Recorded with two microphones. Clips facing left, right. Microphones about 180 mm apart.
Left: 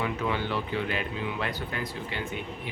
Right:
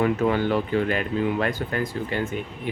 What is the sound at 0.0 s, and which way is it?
Speech, 45° right (ahead or behind).